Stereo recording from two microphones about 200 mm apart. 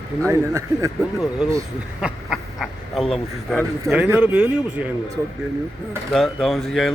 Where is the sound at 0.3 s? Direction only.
15° right (ahead or behind).